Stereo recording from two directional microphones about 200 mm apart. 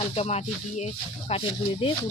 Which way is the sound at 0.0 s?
30° left (ahead or behind).